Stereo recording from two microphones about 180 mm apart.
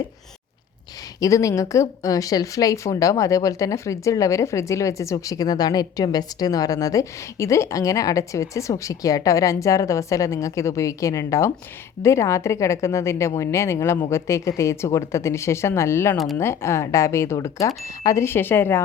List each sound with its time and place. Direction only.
1.2 s a woman's voice: 20° left (ahead or behind)
16.1 s speech: centre (ahead or behind)
16.4 s a woman's voice: 15° left (ahead or behind)